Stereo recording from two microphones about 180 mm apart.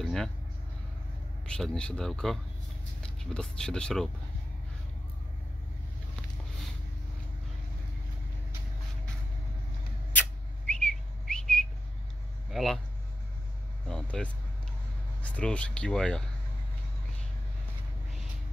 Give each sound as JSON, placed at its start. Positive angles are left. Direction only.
{"t": 0.0, "sound": "a sound", "side_deg": 0}
{"t": 1.4, "sound": "speech", "side_deg": 5}
{"t": 10.7, "sound": "whistling", "side_deg": 5}
{"t": 12.4, "sound": "speech", "side_deg": 0}
{"t": 13.8, "sound": "vehicle", "side_deg": 5}
{"t": 15.2, "sound": "speech", "side_deg": 5}